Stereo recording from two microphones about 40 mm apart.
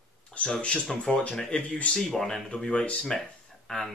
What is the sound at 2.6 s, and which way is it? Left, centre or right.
Speech, left.